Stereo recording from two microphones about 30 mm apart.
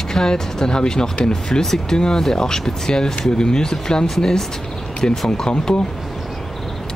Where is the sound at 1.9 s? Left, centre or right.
Centre.